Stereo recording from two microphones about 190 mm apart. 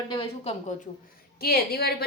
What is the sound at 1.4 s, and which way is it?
Speech, 55° left (ahead or behind).